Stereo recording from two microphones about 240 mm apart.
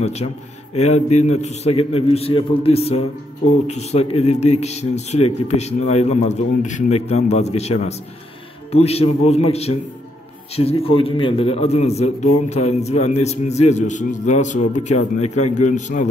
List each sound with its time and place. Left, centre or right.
0.0 s a man's voice: left